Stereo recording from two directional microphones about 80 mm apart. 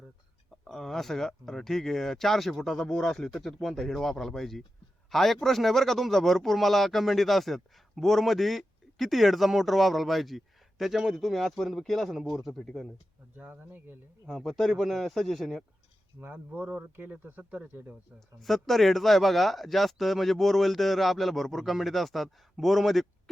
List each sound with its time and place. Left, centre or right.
0.5 s speech: centre
13.3 s speech: right
14.3 s speech: centre
16.2 s speech: right
18.3 s speech: centre